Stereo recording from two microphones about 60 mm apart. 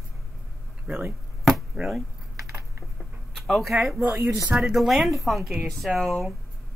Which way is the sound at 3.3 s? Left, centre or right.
Centre.